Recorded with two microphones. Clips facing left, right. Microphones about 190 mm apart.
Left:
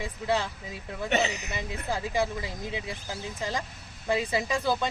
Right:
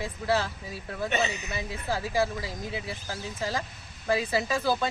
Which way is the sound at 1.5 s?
20° left (ahead or behind).